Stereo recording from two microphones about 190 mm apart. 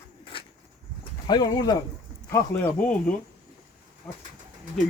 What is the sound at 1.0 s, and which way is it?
Speech, 20° left (ahead or behind).